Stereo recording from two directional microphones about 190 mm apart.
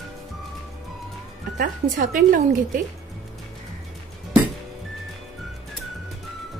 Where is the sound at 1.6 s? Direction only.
45° right (ahead or behind).